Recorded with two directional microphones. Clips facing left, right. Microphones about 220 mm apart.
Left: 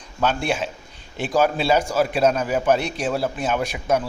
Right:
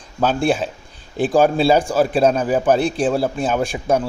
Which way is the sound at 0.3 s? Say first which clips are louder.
Right 5 dB; 35° right (ahead or behind).